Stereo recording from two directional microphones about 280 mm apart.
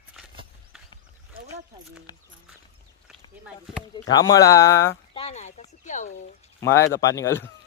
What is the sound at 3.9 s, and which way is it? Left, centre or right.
Speech, centre.